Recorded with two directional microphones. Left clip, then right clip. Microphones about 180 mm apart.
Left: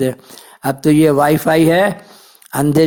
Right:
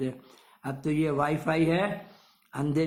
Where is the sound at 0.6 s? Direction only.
50° left (ahead or behind).